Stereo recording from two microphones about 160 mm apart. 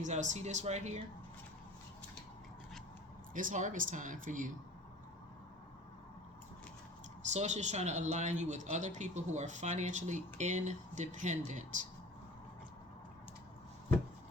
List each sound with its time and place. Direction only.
0.0 s a man's voice: 50° right (ahead or behind)
3.3 s a man's voice: 55° right (ahead or behind)
7.3 s a man's voice: 45° right (ahead or behind)